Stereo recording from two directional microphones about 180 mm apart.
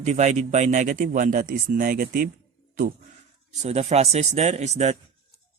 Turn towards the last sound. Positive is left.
turn(degrees=-40)  # may be behind; listen again after turning